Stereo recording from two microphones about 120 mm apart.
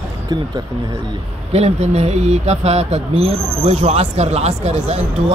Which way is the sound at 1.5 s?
60° right (ahead or behind).